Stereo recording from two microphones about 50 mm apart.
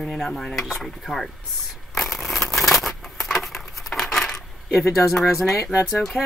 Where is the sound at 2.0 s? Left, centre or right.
Centre.